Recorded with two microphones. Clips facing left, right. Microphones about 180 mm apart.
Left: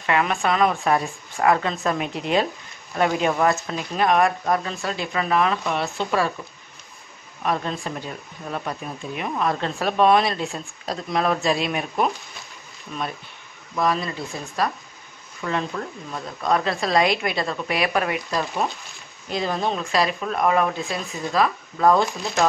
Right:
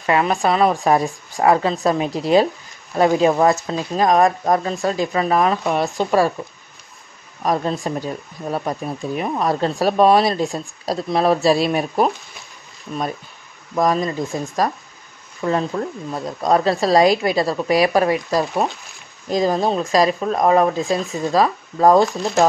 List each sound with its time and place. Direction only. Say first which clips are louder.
0.0 s speech: right 4 dB; 35° right (ahead or behind)
7.4 s speech: right 5 dB; 40° right (ahead or behind)
13.7 s speech: right 5 dB; 40° right (ahead or behind)